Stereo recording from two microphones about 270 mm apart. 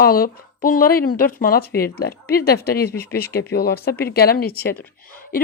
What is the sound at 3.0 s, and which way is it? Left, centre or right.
Speech, centre.